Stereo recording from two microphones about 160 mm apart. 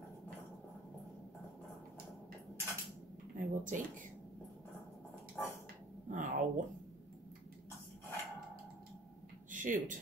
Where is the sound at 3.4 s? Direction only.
55° right (ahead or behind).